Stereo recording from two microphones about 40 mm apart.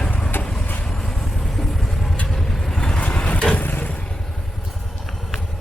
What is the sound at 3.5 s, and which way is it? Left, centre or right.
Vehicle, left.